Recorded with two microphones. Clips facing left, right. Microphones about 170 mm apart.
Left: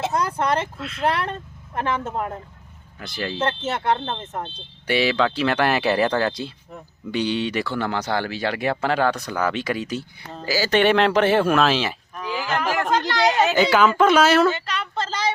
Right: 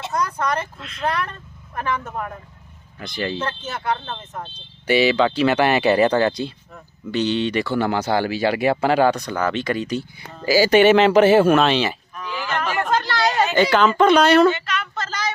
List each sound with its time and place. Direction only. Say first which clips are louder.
0.1 s speech: left 1 dB; 30° left (ahead or behind)
0.8 s speech: left 6 dB; 5° left (ahead or behind)
1.0 s speech: left 1 dB; 30° left (ahead or behind)
3.0 s speech: right 3 dB; 5° left (ahead or behind)
3.3 s speech: left 3 dB; 25° left (ahead or behind)
4.9 s speech: right 4 dB; centre (ahead or behind)
10.4 s speech: right 5 dB; 15° right (ahead or behind)
12.9 s a sound: left 1 dB; 15° left (ahead or behind)
14.5 s child singing: even; 30° left (ahead or behind)